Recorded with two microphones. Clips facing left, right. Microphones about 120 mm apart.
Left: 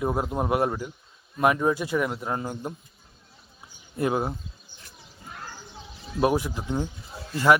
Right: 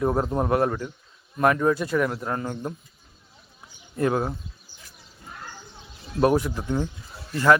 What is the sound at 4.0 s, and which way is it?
Speech, 15° left (ahead or behind).